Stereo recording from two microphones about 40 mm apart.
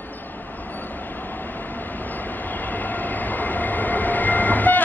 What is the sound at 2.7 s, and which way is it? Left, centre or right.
Train, left.